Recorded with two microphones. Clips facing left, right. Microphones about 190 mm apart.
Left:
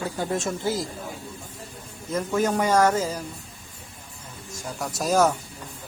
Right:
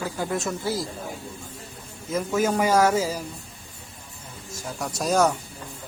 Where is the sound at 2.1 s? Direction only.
5° right (ahead or behind).